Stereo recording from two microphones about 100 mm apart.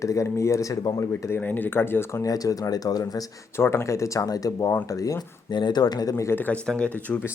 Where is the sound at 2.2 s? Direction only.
35° left (ahead or behind).